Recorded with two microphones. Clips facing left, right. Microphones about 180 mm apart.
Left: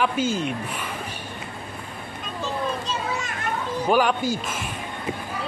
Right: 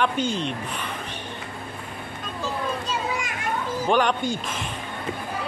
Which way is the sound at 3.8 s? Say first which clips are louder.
Left 1 dB; 5° left (ahead or behind).